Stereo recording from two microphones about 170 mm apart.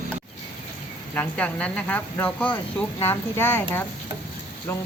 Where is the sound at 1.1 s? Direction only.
10° left (ahead or behind).